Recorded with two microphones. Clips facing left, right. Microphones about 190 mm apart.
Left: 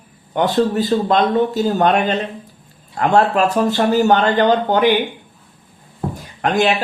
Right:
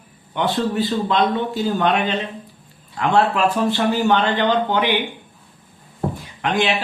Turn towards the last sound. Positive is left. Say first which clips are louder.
# left 4 dB
turn(degrees=45)  # may be behind; listen again after turning